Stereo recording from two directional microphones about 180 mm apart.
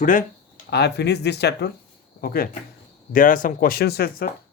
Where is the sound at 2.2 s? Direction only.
55° left (ahead or behind).